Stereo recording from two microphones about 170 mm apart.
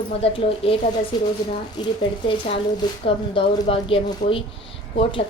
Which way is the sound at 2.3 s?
30° left (ahead or behind).